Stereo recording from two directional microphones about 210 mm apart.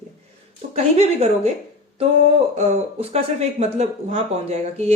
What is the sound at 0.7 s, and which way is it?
Speech, 30° right (ahead or behind).